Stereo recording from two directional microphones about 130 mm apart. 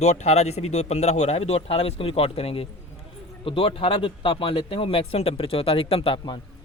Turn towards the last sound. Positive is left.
turn(degrees=45)  # may be behind; listen again after turning